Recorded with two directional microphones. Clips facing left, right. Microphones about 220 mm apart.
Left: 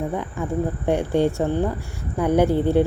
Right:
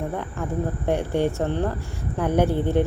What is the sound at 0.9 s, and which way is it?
Speech, 15° left (ahead or behind).